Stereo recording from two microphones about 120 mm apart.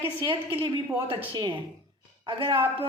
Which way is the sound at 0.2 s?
45° right (ahead or behind).